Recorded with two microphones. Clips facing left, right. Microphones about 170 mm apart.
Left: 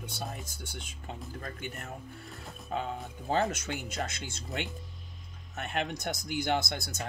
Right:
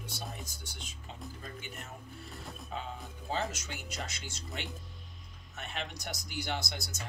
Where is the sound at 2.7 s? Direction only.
50° left (ahead or behind).